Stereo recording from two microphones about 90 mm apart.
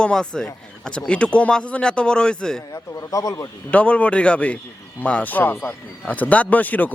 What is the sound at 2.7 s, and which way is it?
Speech, 40° left (ahead or behind).